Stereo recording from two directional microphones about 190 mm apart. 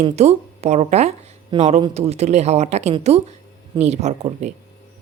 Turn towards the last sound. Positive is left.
turn(degrees=-40)  # may be behind; listen again after turning